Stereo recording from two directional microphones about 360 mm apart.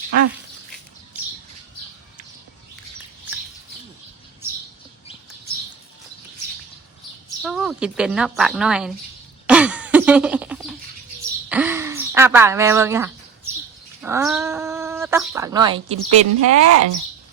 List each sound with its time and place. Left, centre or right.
7.3 s a woman's voice: centre
9.5 s throat clearing: centre
11.4 s a sound: centre
14.0 s speech: centre
16.0 s speech: right